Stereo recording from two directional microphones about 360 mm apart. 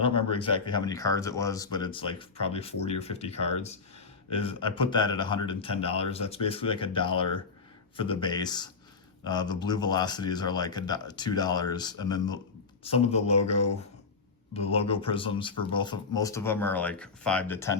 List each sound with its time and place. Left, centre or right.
0.0 s speech: centre
14.5 s speech: centre